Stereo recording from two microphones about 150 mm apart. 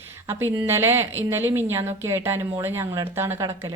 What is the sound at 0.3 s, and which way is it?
A woman's voice, 15° right (ahead or behind).